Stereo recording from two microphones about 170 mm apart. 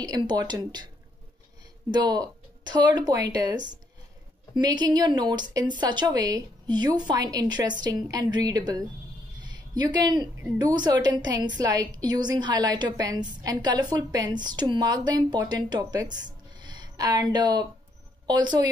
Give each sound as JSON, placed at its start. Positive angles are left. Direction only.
{"t": 0.0, "sound": "a woman's voice", "side_deg": -25}
{"t": 1.9, "sound": "a woman's voice", "side_deg": -25}